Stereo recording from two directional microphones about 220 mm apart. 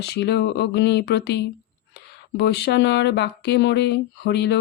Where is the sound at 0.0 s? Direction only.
50° left (ahead or behind).